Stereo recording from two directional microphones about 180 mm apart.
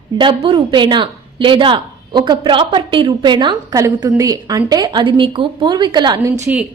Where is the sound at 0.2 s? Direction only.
25° right (ahead or behind).